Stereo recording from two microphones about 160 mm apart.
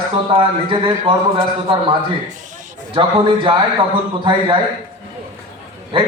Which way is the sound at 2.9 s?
30° right (ahead or behind).